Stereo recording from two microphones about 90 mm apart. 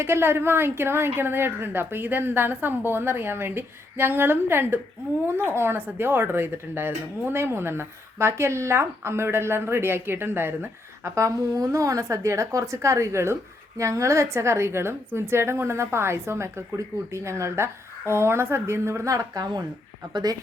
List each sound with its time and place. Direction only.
0.0 s a woman's voice: 25° right (ahead or behind)
11.1 s a woman's voice: 35° right (ahead or behind)